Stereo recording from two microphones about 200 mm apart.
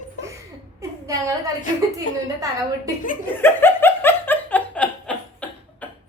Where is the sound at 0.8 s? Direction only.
15° right (ahead or behind).